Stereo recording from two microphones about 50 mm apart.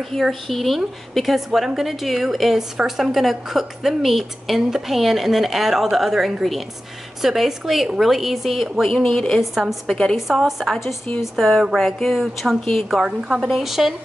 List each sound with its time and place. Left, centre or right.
0.2 s a woman's voice: centre
9.4 s a woman's voice: centre
13.0 s a woman's voice: centre
13.4 s a woman's voice: centre